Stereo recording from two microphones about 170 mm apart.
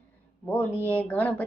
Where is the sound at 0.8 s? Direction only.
10° left (ahead or behind).